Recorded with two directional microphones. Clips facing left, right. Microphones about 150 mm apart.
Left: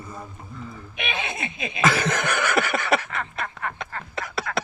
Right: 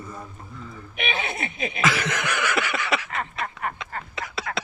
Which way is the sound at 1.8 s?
50° left (ahead or behind).